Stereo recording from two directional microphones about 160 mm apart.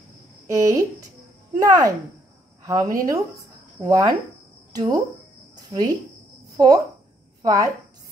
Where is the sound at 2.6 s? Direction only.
20° right (ahead or behind).